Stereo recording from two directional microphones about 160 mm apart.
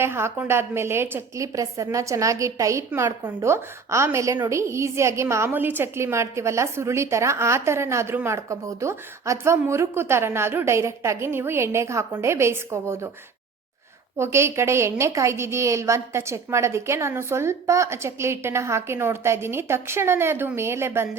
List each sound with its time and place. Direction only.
0.0 s a woman's voice: 15° right (ahead or behind)
14.2 s a woman's voice: 15° right (ahead or behind)